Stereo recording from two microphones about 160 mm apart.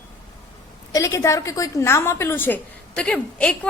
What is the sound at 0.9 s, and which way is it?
A woman's voice, 20° left (ahead or behind).